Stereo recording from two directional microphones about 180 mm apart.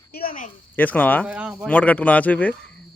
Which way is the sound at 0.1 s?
55° left (ahead or behind).